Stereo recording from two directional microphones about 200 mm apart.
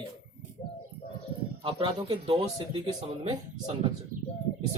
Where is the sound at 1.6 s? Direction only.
25° right (ahead or behind).